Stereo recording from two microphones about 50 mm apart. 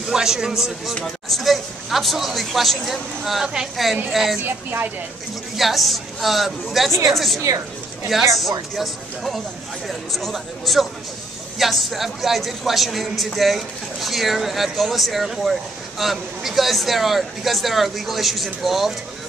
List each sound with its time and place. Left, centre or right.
0.1 s a man's voice: centre
4.5 s speech: right
5.6 s speech: centre